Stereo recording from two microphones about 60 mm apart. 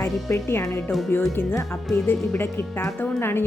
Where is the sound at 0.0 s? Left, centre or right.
Left.